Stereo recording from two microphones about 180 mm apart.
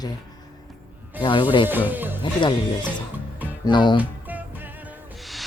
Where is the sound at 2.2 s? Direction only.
25° left (ahead or behind).